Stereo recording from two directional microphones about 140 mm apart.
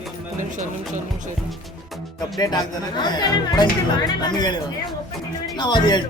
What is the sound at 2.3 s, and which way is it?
Speech, 30° left (ahead or behind).